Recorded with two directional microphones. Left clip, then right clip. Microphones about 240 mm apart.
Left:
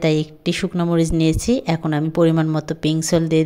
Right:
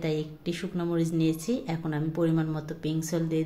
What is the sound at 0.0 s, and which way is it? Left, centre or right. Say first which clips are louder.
Speech: left 11 dB; left.